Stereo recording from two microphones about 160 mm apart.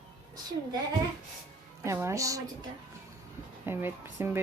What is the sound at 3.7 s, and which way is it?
Speech, 15° right (ahead or behind).